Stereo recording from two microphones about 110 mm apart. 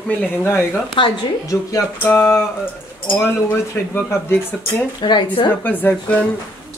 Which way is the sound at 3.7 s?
20° left (ahead or behind).